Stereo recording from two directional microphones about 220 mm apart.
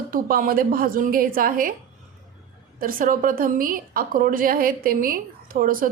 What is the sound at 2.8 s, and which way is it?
A woman's voice, 40° right (ahead or behind).